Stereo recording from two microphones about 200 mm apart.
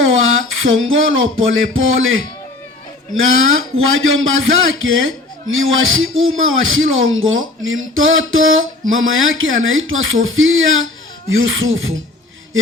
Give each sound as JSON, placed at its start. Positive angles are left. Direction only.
{"t": 0.1, "sound": "music", "side_deg": -80}
{"t": 3.3, "sound": "speech", "side_deg": -80}